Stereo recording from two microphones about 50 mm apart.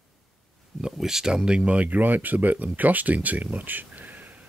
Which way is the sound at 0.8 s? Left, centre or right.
Centre.